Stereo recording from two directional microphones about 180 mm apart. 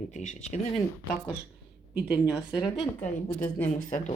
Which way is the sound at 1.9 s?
5° right (ahead or behind).